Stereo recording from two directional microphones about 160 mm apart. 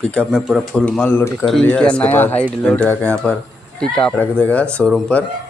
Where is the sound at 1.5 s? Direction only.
5° left (ahead or behind).